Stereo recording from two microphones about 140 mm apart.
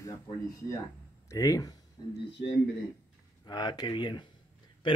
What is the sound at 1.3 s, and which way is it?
Speech, 25° left (ahead or behind).